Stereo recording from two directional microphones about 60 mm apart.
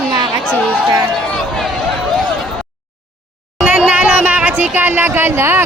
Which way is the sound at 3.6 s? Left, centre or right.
Centre.